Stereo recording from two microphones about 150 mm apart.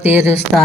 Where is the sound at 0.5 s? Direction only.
5° left (ahead or behind).